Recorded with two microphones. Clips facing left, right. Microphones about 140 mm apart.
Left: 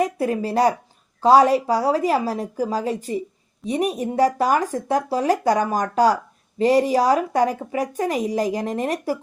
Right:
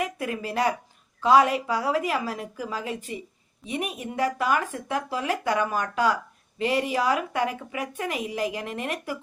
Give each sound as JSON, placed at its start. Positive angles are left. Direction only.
{"t": 0.0, "sound": "a woman's voice", "side_deg": 35}